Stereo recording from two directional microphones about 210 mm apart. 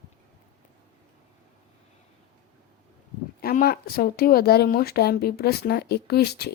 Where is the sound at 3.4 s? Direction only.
45° left (ahead or behind).